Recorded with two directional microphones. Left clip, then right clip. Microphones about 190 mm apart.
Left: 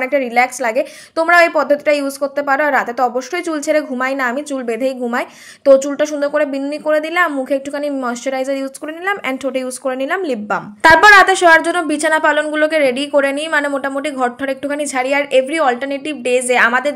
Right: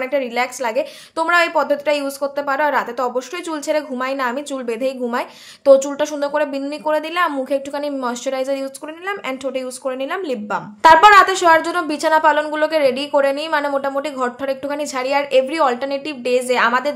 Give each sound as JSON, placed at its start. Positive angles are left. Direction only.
{"t": 0.0, "sound": "a woman's voice", "side_deg": 20}